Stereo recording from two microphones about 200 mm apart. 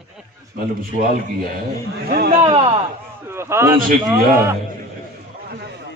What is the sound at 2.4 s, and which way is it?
Speech, 30° right (ahead or behind).